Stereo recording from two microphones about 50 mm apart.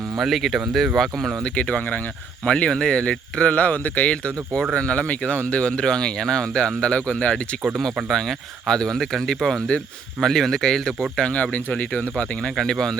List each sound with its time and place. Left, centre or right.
0.2 s speech: centre
1.5 s speech: left
8.1 s speech: centre
11.2 s speech: left